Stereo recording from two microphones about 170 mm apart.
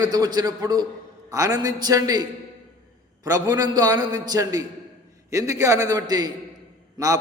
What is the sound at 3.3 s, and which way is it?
A man's voice, 20° right (ahead or behind).